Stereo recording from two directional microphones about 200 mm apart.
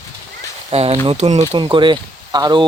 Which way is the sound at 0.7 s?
30° right (ahead or behind).